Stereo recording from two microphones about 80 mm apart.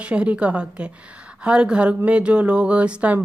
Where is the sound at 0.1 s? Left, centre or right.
Centre.